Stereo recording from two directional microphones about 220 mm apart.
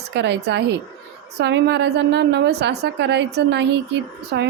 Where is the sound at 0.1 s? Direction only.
50° right (ahead or behind).